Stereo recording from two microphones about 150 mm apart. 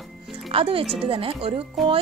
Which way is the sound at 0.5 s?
40° right (ahead or behind).